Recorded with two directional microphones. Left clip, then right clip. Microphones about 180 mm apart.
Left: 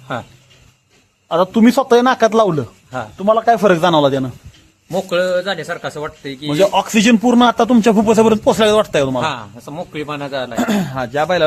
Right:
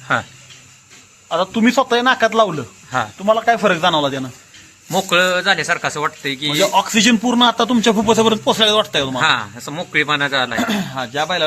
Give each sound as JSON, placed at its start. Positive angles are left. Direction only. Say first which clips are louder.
{"t": 1.3, "sound": "speech", "louder": "left 3 dB", "side_deg": 70}
{"t": 3.2, "sound": "a man's voice", "louder": "left 3 dB", "side_deg": 50}
{"t": 4.9, "sound": "a man's voice", "louder": "right 1 dB", "side_deg": 0}
{"t": 6.5, "sound": "a man's voice", "louder": "left 2 dB", "side_deg": 55}
{"t": 9.2, "sound": "a man's voice", "louder": "right 5 dB", "side_deg": 0}
{"t": 10.6, "sound": "speech", "louder": "left 2 dB", "side_deg": 90}